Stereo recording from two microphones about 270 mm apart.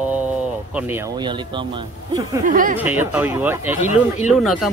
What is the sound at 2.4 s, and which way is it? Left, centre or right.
Speech, right.